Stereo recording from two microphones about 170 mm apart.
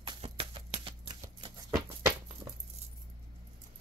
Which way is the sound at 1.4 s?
20° right (ahead or behind).